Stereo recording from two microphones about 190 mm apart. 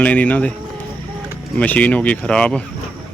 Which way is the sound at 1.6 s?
5° left (ahead or behind).